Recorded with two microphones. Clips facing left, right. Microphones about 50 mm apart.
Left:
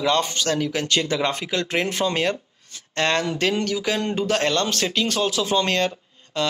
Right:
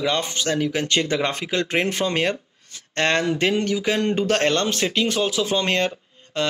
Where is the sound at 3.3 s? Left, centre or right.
Right.